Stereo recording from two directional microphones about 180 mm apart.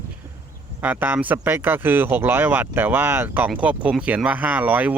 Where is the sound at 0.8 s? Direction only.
10° right (ahead or behind).